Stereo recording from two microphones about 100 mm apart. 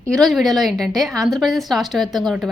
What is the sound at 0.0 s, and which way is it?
A woman's voice, 5° left (ahead or behind).